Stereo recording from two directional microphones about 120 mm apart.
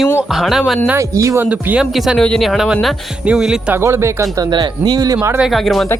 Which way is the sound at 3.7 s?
20° right (ahead or behind).